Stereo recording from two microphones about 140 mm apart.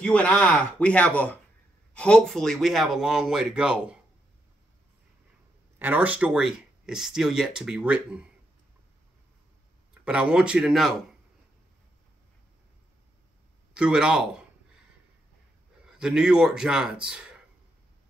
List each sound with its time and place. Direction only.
0.0 s a man's voice: 10° left (ahead or behind); by 4.0 s 5° right (ahead or behind)
5.8 s speech: 10° right (ahead or behind)
10.0 s speech: 5° right (ahead or behind)
13.7 s speech: 5° right (ahead or behind)
15.8 s speech: 5° right (ahead or behind)